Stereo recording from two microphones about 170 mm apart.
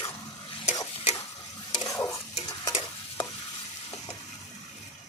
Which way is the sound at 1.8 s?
20° left (ahead or behind).